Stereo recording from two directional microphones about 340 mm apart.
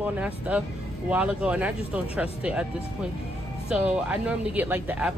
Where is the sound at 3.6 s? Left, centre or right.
Centre.